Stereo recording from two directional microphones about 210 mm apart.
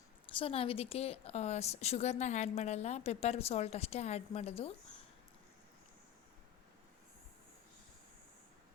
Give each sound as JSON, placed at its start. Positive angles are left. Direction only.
{"t": 0.3, "sound": "a woman's voice", "side_deg": 25}